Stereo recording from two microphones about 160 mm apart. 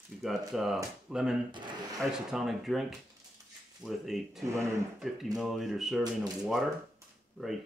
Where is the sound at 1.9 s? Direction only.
Centre (ahead or behind).